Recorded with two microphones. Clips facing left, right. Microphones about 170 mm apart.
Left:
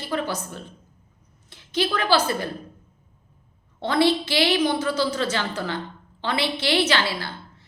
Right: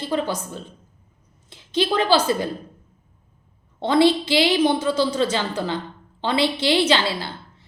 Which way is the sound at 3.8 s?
20° right (ahead or behind).